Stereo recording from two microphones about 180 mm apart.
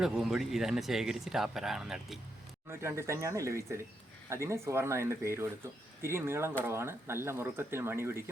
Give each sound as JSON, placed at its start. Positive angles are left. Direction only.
{"t": 0.0, "sound": "speech", "side_deg": -5}
{"t": 2.6, "sound": "speech", "side_deg": -15}